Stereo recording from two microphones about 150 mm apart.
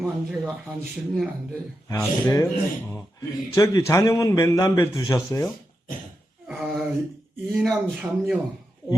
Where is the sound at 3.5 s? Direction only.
20° left (ahead or behind).